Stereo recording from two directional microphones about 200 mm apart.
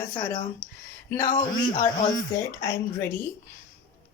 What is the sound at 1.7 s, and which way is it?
A woman's voice, 20° left (ahead or behind).